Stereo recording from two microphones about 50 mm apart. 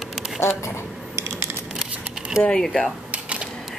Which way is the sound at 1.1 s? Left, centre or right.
Right.